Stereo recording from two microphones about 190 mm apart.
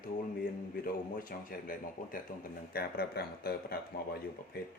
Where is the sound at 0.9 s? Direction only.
50° left (ahead or behind).